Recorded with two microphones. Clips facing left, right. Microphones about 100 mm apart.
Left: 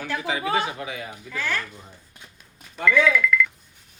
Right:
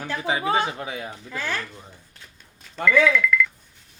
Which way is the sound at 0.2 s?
30° right (ahead or behind).